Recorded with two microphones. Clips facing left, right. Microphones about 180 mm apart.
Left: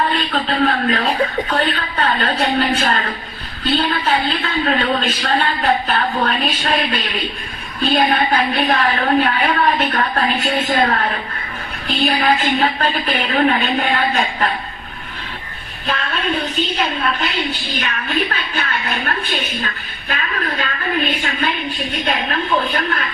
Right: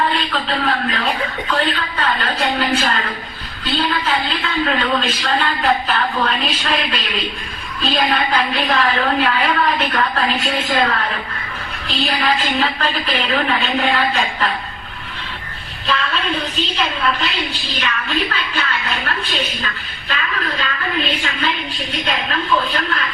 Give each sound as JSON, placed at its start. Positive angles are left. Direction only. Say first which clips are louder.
{"t": 0.4, "sound": "a woman's voice", "louder": "left 6 dB", "side_deg": 45}
{"t": 8.1, "sound": "a woman's voice", "louder": "left 2 dB", "side_deg": 50}
{"t": 15.9, "sound": "a sound", "louder": "right 1 dB", "side_deg": 50}
{"t": 16.7, "sound": "a woman's voice", "louder": "even", "side_deg": 50}